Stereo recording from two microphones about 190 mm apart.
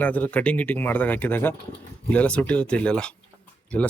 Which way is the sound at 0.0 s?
10° left (ahead or behind).